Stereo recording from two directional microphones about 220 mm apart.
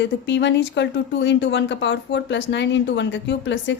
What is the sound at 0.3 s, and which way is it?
A woman's voice, 55° left (ahead or behind).